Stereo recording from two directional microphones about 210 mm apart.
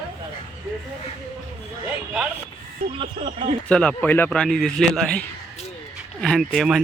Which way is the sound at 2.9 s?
25° right (ahead or behind).